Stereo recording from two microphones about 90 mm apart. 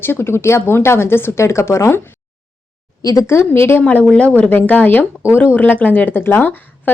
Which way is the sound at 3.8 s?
15° left (ahead or behind).